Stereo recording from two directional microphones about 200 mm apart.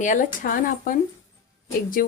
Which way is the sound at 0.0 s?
40° left (ahead or behind).